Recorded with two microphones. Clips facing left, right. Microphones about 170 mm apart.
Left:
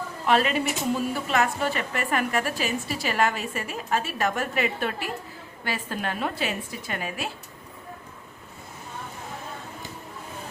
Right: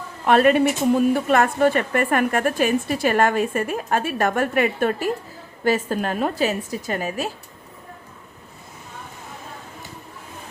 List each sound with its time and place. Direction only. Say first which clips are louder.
0.3 s a woman's voice: right 7 dB; 50° right (ahead or behind)